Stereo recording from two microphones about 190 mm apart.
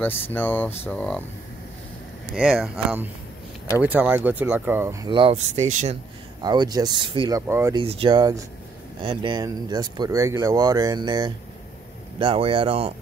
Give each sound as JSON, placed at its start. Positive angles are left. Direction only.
{"t": 0.0, "sound": "speech", "side_deg": 10}
{"t": 2.3, "sound": "speech", "side_deg": -5}
{"t": 6.4, "sound": "speech", "side_deg": -20}
{"t": 7.7, "sound": "speech", "side_deg": -30}